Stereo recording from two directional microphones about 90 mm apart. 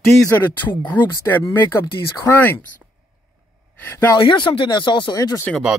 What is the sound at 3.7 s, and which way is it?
Speech, 20° left (ahead or behind).